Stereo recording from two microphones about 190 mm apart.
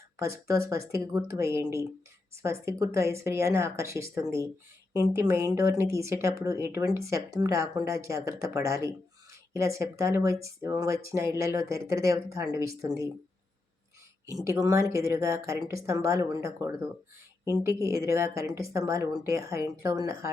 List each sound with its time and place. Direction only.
0.2 s speech: 15° right (ahead or behind)
14.4 s speech: 15° right (ahead or behind)